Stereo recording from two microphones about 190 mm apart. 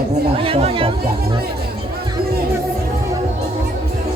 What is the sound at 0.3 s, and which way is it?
Chatter, 30° right (ahead or behind).